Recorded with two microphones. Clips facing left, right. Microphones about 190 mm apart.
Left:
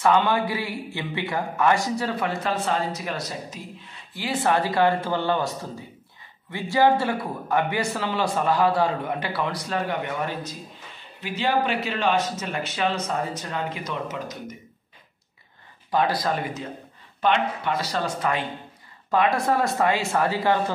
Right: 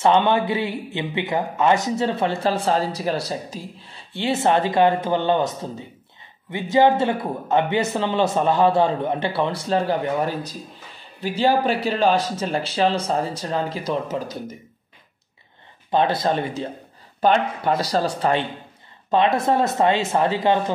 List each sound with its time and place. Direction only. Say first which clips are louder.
0.0 s a man's voice: right 3 dB; 25° right (ahead or behind)
15.9 s a man's voice: right 3 dB; 25° right (ahead or behind)